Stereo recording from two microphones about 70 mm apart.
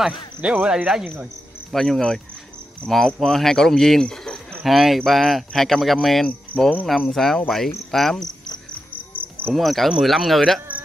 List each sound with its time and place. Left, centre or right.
0.0 s speech: centre
1.7 s speech: centre
9.5 s speech: centre